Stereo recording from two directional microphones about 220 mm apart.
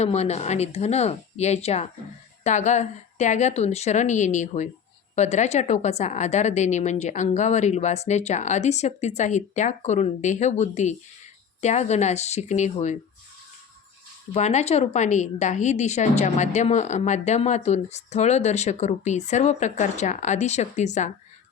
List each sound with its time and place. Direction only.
0.0 s a woman's voice: 30° left (ahead or behind)
14.3 s a woman's voice: 30° left (ahead or behind)